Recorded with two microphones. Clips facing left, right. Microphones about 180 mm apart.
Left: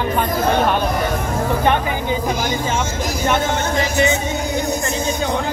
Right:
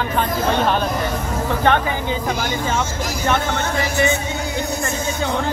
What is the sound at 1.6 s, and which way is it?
Speech, 15° left (ahead or behind).